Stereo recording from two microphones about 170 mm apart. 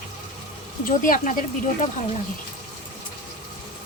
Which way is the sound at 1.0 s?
55° left (ahead or behind).